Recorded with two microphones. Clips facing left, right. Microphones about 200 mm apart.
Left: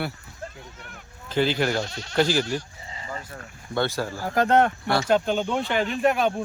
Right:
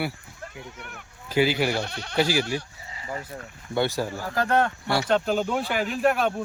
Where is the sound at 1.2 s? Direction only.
10° right (ahead or behind).